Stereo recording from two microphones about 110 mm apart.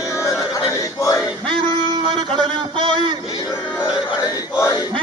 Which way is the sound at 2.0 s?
50° right (ahead or behind).